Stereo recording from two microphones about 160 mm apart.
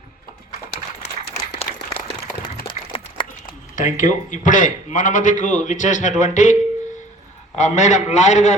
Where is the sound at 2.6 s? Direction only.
30° left (ahead or behind).